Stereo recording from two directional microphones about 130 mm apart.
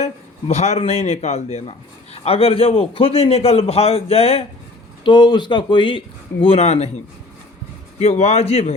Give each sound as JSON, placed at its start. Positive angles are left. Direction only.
{"t": 0.0, "sound": "a man's voice", "side_deg": 55}
{"t": 5.0, "sound": "speech", "side_deg": 35}
{"t": 6.4, "sound": "a man's voice", "side_deg": 50}